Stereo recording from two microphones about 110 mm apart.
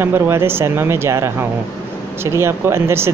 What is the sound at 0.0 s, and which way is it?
Speech, 20° right (ahead or behind).